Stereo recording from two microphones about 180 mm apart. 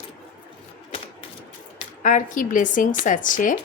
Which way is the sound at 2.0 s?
45° left (ahead or behind).